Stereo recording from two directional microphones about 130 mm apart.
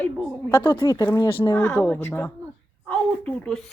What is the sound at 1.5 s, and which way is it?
A woman's voice, 15° left (ahead or behind).